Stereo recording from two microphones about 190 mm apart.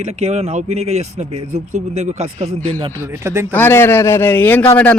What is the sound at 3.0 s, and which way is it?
Speech, 15° right (ahead or behind).